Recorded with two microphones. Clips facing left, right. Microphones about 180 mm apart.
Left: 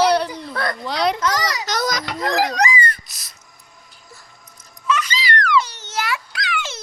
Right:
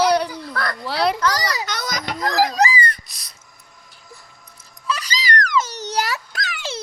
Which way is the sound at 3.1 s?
Centre (ahead or behind).